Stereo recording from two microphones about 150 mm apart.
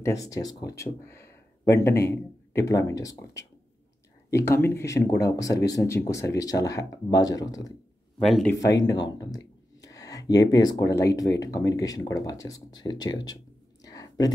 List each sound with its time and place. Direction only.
0.0 s speech: 20° left (ahead or behind)
8.2 s speech: centre (ahead or behind)
8.5 s speech: 25° left (ahead or behind)
13.8 s a sound: 25° left (ahead or behind)